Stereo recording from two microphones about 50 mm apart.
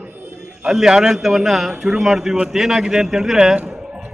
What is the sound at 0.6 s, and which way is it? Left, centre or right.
A man's voice, centre.